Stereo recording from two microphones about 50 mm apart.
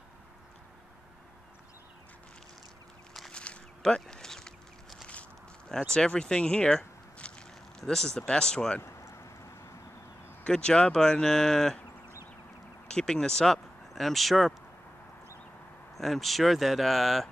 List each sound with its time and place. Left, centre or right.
3.3 s a sound: centre
7.9 s speech: centre
8.8 s a sound: left
10.4 s speech: centre
12.8 s speech: centre
15.9 s speech: centre